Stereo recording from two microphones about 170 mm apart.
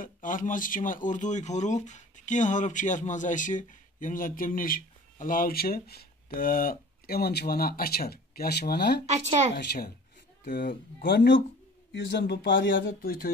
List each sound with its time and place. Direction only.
0.0 s speech: 50° left (ahead or behind); by 9.8 s 75° left (ahead or behind)
10.4 s speech: 55° left (ahead or behind)
11.1 s speech: 90° left; by 13.3 s 65° left (ahead or behind)